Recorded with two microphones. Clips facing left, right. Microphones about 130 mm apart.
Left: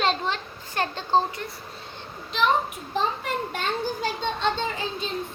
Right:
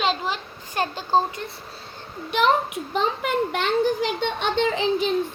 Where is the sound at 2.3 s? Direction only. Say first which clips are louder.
Right 3 dB; 70° right (ahead or behind).